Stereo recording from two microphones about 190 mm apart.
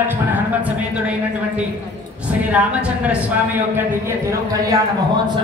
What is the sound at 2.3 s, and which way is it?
A woman's voice, 10° right (ahead or behind).